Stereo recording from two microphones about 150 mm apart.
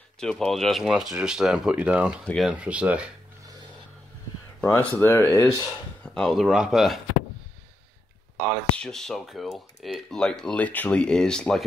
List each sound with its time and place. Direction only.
0.2 s speech: 5° left (ahead or behind)
2.2 s speech: 5° left (ahead or behind)
2.5 s speech: 10° right (ahead or behind)
4.6 s speech: 10° left (ahead or behind)
6.0 s speech: 5° left (ahead or behind)
8.7 s speech: 5° left (ahead or behind)